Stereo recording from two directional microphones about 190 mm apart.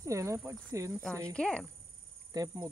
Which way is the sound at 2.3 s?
20° right (ahead or behind).